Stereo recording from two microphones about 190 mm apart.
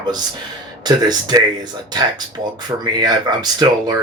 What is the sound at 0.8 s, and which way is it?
Speech, 20° right (ahead or behind).